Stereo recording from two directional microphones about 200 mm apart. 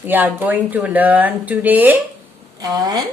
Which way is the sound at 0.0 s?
10° right (ahead or behind).